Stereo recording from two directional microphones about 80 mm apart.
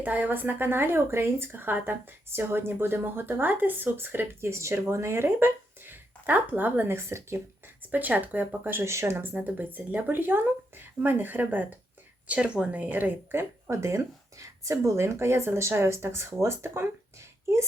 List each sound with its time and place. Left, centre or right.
0.0 s speech: right
7.9 s speech: right
13.7 s speech: right